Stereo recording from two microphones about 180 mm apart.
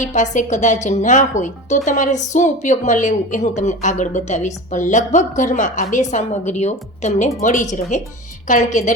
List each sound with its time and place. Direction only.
0.0 s a woman's voice: 45° left (ahead or behind)